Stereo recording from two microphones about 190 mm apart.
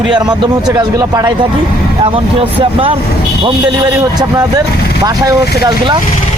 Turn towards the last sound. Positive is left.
turn(degrees=-20)  # may be behind; listen again after turning